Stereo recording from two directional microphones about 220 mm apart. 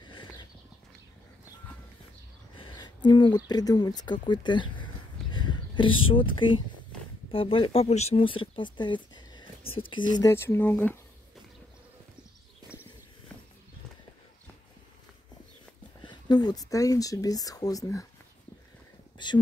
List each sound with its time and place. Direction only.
0.0 s clip-clop: 20° left (ahead or behind)
2.5 s speech: 20° left (ahead or behind)
5.3 s a sound: 20° left (ahead or behind)
6.1 s speech: 20° left (ahead or behind)
16.0 s speech: 20° left (ahead or behind)
19.1 s a sound: 20° left (ahead or behind)